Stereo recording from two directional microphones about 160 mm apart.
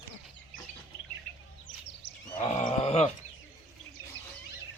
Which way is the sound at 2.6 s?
45° left (ahead or behind).